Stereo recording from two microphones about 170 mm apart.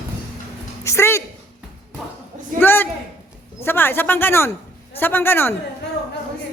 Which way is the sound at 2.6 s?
10° left (ahead or behind).